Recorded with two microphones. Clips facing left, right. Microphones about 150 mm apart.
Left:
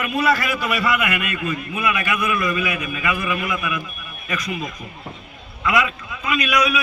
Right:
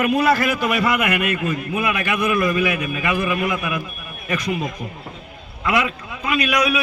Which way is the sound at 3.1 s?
40° right (ahead or behind).